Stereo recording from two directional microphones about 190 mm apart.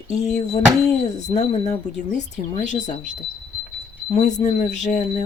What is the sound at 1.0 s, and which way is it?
Speech, 35° left (ahead or behind).